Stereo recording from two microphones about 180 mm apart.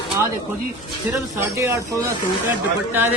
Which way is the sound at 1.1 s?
15° right (ahead or behind).